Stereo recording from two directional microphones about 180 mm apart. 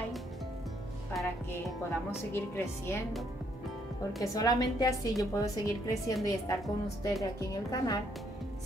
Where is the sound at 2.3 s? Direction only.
15° left (ahead or behind).